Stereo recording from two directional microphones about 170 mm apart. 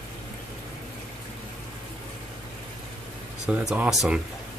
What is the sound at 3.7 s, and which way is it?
Speech, 5° right (ahead or behind).